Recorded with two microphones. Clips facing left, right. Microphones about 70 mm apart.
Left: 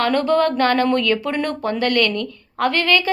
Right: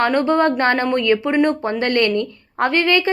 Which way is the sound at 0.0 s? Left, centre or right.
Right.